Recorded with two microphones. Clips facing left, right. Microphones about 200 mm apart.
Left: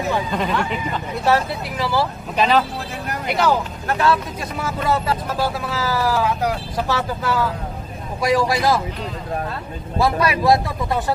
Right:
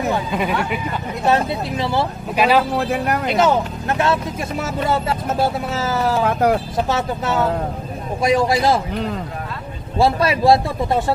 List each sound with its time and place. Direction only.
0.3 s speech: 10° right (ahead or behind)
1.2 s speech: 20° right (ahead or behind)
2.3 s speech: 10° right (ahead or behind)
3.3 s speech: 20° right (ahead or behind)
9.9 s speech: 25° right (ahead or behind)